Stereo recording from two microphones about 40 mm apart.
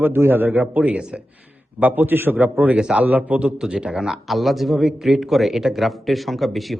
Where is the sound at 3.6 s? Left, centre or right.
Right.